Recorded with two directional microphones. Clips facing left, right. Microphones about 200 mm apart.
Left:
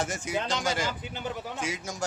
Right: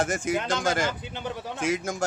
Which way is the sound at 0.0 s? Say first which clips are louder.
Right 4 dB; 50° right (ahead or behind).